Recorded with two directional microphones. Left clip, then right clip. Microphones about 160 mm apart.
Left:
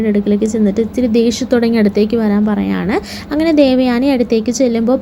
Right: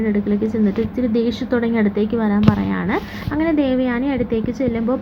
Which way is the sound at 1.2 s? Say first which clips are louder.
Left 6 dB; 25° left (ahead or behind).